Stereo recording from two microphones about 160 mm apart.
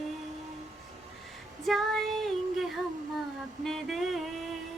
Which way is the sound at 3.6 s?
Centre (ahead or behind).